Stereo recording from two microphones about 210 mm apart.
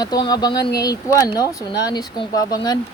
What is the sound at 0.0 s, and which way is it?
Speech, 20° left (ahead or behind).